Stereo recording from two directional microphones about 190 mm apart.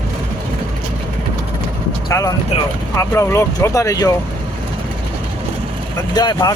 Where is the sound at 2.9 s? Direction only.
15° left (ahead or behind).